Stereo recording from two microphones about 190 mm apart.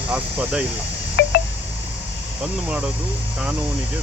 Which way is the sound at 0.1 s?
5° right (ahead or behind).